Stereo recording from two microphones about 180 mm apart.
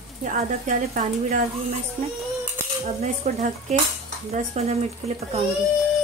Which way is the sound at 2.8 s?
40° right (ahead or behind).